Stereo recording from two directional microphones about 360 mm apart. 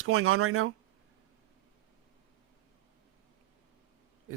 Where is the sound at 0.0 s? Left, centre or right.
Right.